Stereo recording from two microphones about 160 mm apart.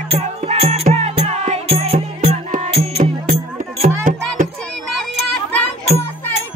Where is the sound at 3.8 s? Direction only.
60° right (ahead or behind).